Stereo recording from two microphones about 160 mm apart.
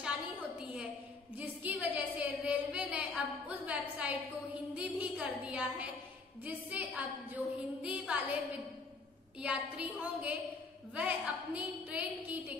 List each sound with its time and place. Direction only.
1.4 s a woman's voice: 10° right (ahead or behind)
9.4 s a woman's voice: 10° right (ahead or behind)